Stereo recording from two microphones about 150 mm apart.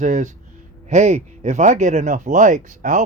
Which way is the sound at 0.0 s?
55° right (ahead or behind).